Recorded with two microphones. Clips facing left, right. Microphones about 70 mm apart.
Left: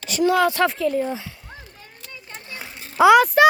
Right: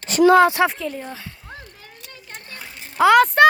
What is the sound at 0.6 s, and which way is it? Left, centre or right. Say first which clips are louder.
Speech: left 1 dB; centre.